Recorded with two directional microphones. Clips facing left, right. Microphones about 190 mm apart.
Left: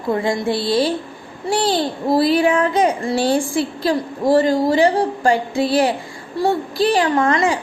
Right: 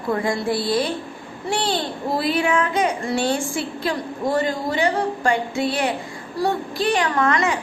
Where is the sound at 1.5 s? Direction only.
40° left (ahead or behind).